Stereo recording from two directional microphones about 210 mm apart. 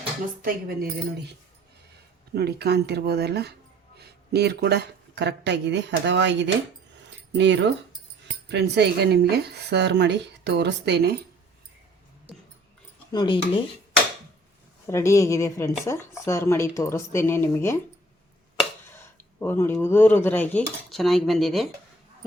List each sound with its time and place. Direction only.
0.4 s speech: 45° right (ahead or behind)
2.3 s speech: 50° right (ahead or behind)
13.1 s speech: 20° left (ahead or behind)
14.8 s speech: 15° left (ahead or behind)
18.9 s speech: 10° left (ahead or behind)